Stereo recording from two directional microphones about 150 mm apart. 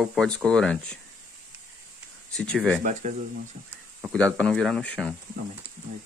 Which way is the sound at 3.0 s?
60° right (ahead or behind).